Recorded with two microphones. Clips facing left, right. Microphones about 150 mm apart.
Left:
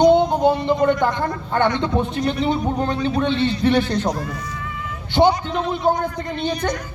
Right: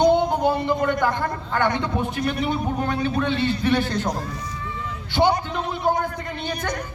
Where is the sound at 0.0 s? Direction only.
20° left (ahead or behind).